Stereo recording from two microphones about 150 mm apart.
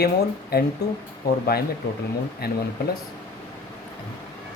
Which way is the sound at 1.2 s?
90° left.